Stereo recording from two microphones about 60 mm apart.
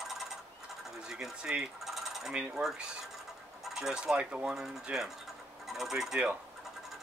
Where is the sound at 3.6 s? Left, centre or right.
Centre.